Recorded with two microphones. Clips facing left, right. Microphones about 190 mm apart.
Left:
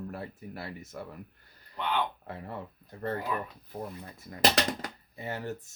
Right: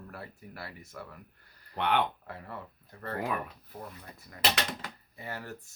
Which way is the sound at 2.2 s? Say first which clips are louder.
Left 3 dB; 25° left (ahead or behind).